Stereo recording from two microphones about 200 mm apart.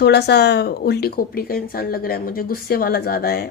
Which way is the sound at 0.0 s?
55° left (ahead or behind).